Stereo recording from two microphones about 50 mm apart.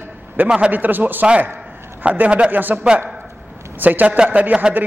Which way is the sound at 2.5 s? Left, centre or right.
Right.